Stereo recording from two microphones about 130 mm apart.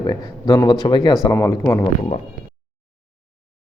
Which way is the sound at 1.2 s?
15° left (ahead or behind).